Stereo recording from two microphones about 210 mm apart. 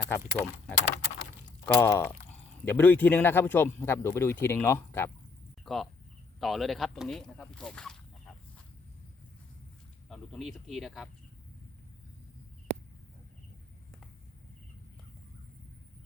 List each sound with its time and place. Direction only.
0.1 s speech: 10° left (ahead or behind)
5.6 s speech: centre (ahead or behind)
10.1 s speech: centre (ahead or behind)